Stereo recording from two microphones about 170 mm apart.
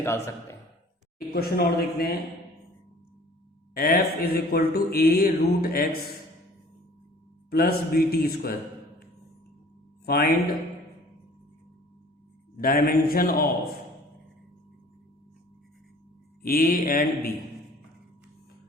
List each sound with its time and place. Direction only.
1.3 s a man's voice: 65° left (ahead or behind)
3.8 s mantra: 60° left (ahead or behind)
7.5 s mantra: 60° left (ahead or behind)
10.1 s mantra: 65° left (ahead or behind)
12.5 s mantra: 60° left (ahead or behind)
16.4 s mantra: 60° left (ahead or behind)